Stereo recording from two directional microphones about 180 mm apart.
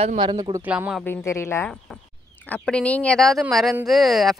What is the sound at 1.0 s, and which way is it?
A woman's voice, 15° left (ahead or behind).